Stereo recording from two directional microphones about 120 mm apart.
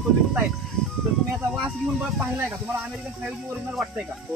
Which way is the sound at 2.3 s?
15° right (ahead or behind).